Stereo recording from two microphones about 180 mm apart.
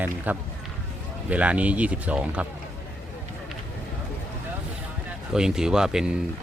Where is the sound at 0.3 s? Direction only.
10° right (ahead or behind).